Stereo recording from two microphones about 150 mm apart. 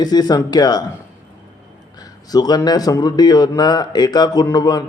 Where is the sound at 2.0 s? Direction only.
25° left (ahead or behind).